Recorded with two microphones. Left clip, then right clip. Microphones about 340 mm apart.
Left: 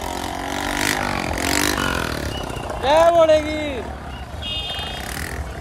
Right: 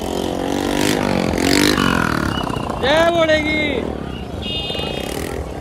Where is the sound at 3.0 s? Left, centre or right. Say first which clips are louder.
Left 3 dB; centre.